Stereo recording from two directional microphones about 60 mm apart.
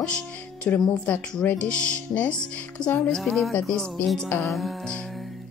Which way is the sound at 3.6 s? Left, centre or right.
Centre.